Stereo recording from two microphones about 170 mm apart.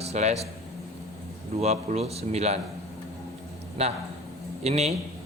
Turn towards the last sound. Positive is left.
turn(degrees=-40)  # may be behind; listen again after turning